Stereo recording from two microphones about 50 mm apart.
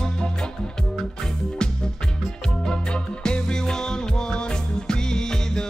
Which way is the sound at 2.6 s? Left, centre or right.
Centre.